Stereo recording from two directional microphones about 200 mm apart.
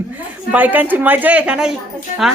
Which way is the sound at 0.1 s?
10° right (ahead or behind).